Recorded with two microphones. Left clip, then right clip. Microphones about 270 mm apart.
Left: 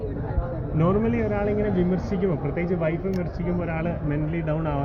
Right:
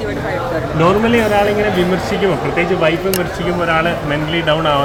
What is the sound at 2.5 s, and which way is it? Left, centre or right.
A man's voice, centre.